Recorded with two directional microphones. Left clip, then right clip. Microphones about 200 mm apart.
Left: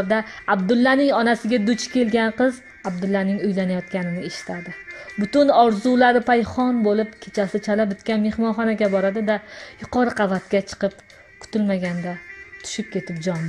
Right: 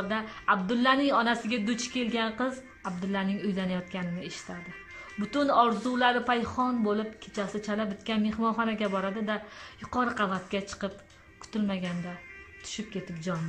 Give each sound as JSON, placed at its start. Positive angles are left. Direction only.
{"t": 0.1, "sound": "a woman's voice", "side_deg": 25}